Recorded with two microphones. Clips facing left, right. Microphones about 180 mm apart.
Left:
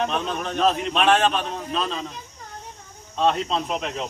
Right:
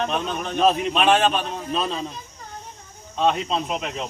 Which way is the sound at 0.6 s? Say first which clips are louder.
Right 2 dB; 15° right (ahead or behind).